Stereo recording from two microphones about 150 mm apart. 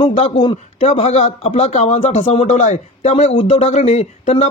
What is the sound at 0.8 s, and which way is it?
Speech, 45° left (ahead or behind).